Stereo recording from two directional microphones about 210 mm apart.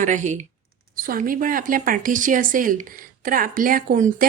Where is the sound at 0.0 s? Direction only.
35° right (ahead or behind).